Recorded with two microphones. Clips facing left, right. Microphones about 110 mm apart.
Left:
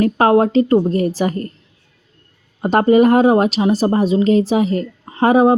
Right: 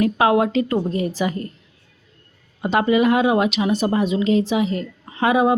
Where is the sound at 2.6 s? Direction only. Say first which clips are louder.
Left 6 dB; 45° left (ahead or behind).